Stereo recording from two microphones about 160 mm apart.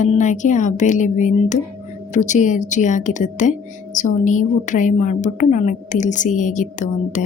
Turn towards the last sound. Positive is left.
turn(degrees=50)  # may be behind; listen again after turning